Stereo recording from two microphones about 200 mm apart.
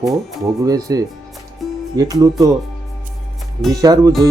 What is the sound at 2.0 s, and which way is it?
Speech, 20° right (ahead or behind).